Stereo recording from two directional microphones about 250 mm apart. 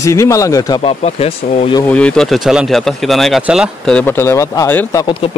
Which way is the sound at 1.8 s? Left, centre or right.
Centre.